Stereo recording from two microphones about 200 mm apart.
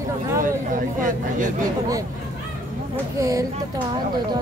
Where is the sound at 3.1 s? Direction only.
15° right (ahead or behind).